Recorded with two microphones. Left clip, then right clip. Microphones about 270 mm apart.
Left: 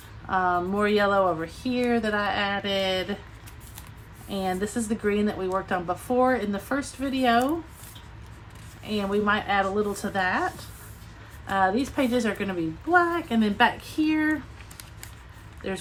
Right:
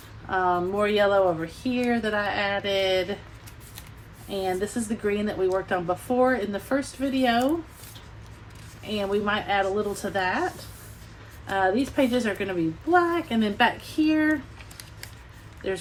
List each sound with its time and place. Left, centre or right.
0.3 s speech: left
4.3 s speech: left
8.8 s speech: left